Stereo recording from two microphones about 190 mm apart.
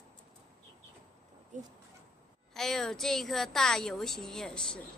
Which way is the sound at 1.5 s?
40° right (ahead or behind).